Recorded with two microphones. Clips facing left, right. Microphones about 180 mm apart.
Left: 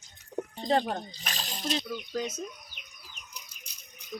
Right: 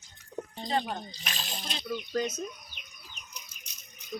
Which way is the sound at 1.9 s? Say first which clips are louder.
Right 2 dB; 5° left (ahead or behind).